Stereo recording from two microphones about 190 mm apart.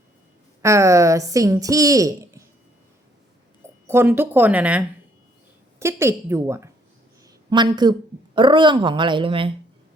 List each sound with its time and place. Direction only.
0.6 s a woman's voice: 15° right (ahead or behind)
3.8 s a woman's voice: 10° right (ahead or behind)